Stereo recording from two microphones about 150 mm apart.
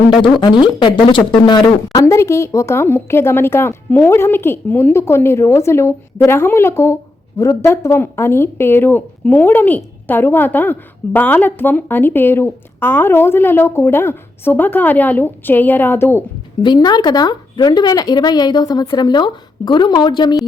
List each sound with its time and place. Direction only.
0.1 s speech: 30° left (ahead or behind); by 16.2 s 15° left (ahead or behind)
16.6 s a woman's voice: 30° left (ahead or behind)